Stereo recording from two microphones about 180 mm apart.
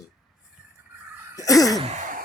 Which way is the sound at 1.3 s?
20° left (ahead or behind).